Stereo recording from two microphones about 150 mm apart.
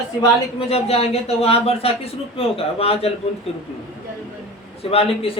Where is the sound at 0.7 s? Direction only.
40° left (ahead or behind).